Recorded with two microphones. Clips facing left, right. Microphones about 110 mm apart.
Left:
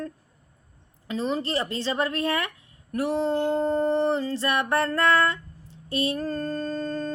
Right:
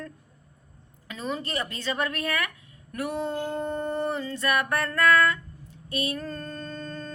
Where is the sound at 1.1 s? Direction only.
30° left (ahead or behind).